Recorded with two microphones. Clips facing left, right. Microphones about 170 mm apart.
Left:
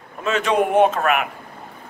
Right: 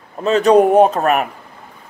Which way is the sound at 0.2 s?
35° right (ahead or behind).